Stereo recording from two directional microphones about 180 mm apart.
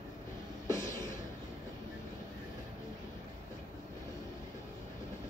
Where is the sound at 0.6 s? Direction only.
15° left (ahead or behind).